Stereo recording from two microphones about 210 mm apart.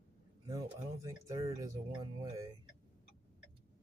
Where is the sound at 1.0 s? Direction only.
15° right (ahead or behind).